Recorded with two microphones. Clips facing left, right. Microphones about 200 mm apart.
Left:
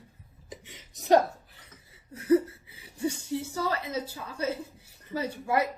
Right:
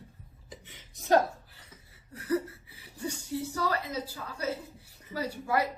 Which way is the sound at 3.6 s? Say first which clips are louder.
Even; 25° left (ahead or behind).